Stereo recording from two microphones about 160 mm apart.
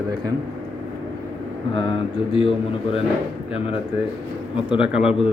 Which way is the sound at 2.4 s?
35° left (ahead or behind).